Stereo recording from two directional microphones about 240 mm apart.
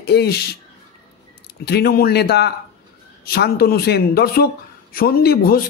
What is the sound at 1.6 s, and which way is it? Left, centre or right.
Speech, left.